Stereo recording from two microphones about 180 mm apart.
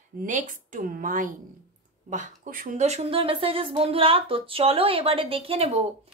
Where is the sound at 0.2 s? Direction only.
45° right (ahead or behind).